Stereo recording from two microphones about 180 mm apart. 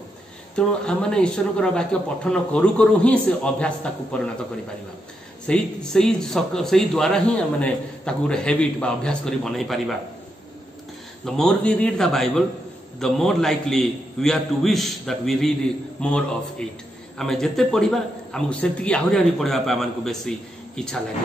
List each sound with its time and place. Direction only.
0.6 s speech: 5° left (ahead or behind)
5.5 s speech: 5° left (ahead or behind)
11.2 s speech: 5° left (ahead or behind)